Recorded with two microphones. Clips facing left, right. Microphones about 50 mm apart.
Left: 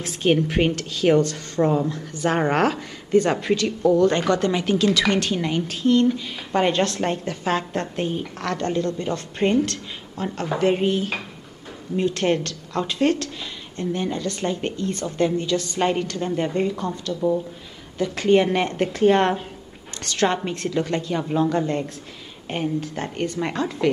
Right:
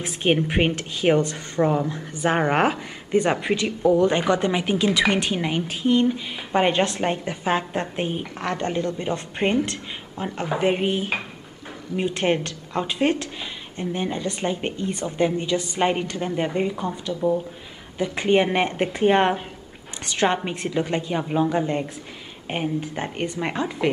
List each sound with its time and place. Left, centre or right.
0.0 s a woman's voice: right